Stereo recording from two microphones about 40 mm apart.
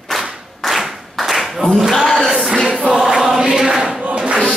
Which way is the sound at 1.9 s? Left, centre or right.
Centre.